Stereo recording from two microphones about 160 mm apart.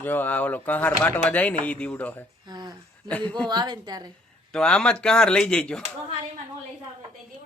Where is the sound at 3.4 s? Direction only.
25° right (ahead or behind).